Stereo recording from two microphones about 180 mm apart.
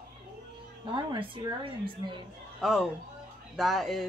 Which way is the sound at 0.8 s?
25° right (ahead or behind).